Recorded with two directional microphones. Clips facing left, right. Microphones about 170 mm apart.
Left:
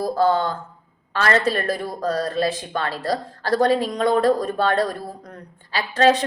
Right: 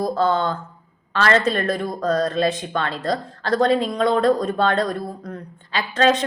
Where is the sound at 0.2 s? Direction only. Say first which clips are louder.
Left 4 dB; 40° left (ahead or behind).